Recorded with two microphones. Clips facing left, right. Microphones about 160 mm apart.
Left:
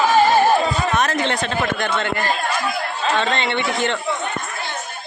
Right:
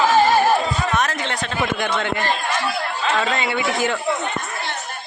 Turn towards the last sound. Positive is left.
turn(degrees=-5)  # may be behind; listen again after turning